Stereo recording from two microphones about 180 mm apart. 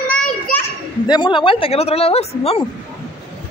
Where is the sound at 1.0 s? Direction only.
25° left (ahead or behind).